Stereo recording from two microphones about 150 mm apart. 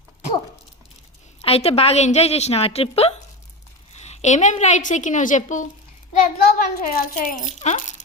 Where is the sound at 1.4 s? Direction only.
40° left (ahead or behind); by 5.6 s 55° left (ahead or behind).